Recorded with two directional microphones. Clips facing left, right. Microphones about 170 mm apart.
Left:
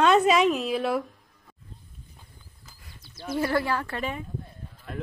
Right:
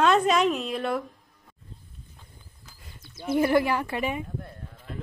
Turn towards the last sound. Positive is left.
turn(degrees=-15)  # may be behind; listen again after turning